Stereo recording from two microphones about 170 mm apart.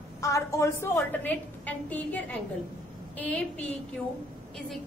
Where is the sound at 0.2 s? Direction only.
20° left (ahead or behind).